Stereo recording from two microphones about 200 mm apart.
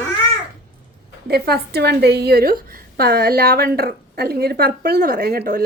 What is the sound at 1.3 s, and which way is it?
A woman's voice, 50° right (ahead or behind).